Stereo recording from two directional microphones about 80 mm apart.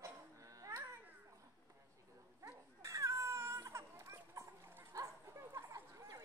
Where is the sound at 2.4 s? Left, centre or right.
Right.